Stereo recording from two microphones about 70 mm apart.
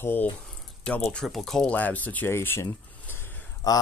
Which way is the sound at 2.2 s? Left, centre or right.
Left.